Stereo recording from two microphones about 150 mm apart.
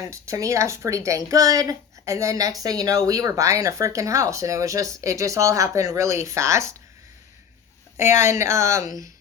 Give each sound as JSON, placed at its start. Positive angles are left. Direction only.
{"t": 0.0, "sound": "speech", "side_deg": -20}
{"t": 7.9, "sound": "speech", "side_deg": -15}